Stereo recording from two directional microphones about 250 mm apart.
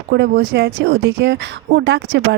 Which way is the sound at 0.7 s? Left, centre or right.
Right.